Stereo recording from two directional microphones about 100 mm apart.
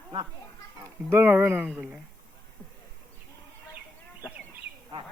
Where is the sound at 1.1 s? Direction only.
20° right (ahead or behind).